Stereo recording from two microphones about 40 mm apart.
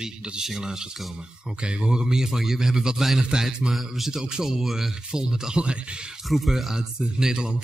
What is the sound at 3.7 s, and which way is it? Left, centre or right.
A man's voice, centre.